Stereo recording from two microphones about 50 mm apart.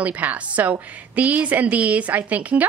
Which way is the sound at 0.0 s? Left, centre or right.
Right.